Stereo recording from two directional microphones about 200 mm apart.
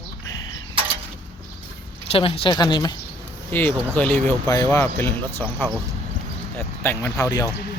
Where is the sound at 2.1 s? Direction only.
30° left (ahead or behind).